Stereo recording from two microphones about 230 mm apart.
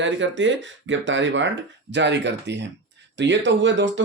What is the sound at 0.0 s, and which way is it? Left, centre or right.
Speech, right.